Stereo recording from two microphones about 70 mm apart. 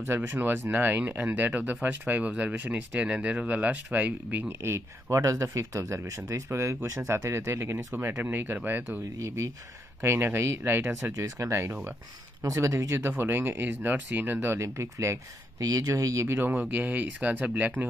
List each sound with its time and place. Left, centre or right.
0.0 s speech: right
4.5 s speech: right
6.0 s speech: right
8.2 s speech: right
9.2 s speech: right
10.0 s speech: right
12.5 s speech: right
12.9 s speech: right
15.6 s speech: right
16.3 s speech: right